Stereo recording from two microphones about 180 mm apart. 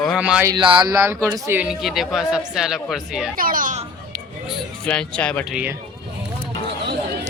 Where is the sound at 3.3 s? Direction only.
50° right (ahead or behind).